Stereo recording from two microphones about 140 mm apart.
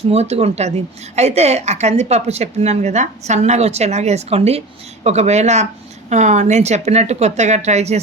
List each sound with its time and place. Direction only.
0.1 s speech: 50° right (ahead or behind)